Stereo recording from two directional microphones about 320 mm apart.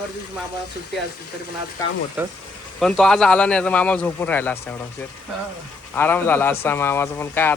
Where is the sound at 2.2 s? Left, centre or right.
Centre.